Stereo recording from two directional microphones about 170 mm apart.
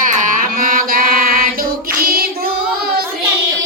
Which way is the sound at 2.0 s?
60° right (ahead or behind).